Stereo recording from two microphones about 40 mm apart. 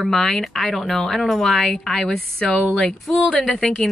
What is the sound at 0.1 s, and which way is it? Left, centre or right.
Speech, centre.